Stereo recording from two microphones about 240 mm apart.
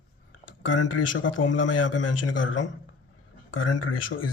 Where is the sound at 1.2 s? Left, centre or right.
Left.